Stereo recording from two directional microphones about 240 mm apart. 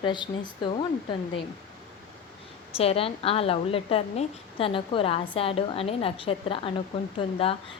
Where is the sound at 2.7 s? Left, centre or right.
Left.